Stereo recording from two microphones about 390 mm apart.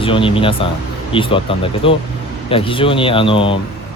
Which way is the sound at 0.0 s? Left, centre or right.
Centre.